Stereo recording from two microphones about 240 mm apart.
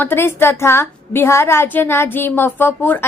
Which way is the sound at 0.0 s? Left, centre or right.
Centre.